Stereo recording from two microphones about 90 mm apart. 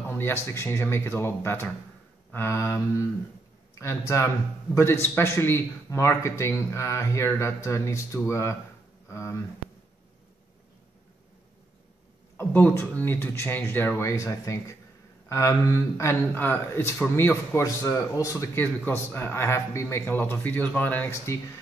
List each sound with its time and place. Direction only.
0.1 s speech: 30° left (ahead or behind)
3.8 s speech: 30° left (ahead or behind)
12.4 s speech: 20° left (ahead or behind)
18.6 s speech: 25° left (ahead or behind)